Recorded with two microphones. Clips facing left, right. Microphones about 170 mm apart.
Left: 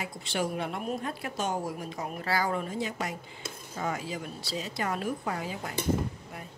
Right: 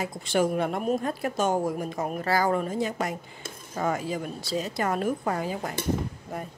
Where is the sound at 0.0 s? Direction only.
45° right (ahead or behind).